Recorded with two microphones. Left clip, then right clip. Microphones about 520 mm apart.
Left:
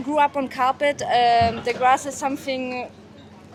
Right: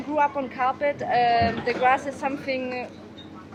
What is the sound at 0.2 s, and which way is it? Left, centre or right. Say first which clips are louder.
A woman's voice: left 3 dB; left.